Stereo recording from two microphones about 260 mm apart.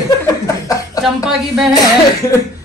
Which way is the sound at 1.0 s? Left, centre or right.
Centre.